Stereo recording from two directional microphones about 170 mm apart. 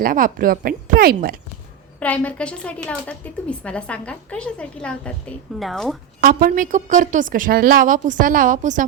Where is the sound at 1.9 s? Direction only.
10° left (ahead or behind).